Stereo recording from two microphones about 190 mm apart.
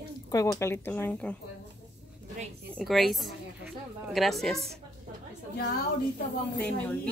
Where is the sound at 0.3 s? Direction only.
15° left (ahead or behind).